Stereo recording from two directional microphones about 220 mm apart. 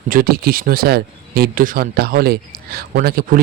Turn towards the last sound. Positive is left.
turn(degrees=-40)  # may be behind; listen again after turning